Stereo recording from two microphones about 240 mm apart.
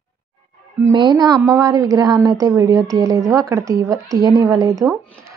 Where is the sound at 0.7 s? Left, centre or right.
Centre.